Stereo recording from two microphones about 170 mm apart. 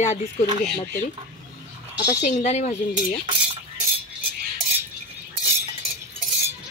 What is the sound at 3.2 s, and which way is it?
Speech, 30° right (ahead or behind).